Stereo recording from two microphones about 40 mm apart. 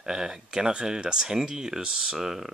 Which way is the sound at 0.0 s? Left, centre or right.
Centre.